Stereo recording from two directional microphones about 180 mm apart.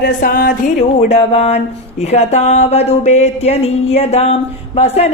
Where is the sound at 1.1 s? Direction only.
35° left (ahead or behind).